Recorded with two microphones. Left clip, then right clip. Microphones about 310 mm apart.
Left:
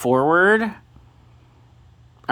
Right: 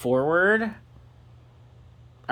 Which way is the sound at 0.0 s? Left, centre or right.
Centre.